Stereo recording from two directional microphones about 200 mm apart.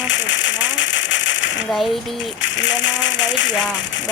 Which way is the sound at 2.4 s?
65° left (ahead or behind).